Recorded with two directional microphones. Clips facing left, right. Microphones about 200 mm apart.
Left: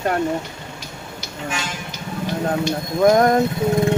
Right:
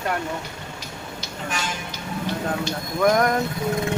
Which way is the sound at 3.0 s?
30° left (ahead or behind).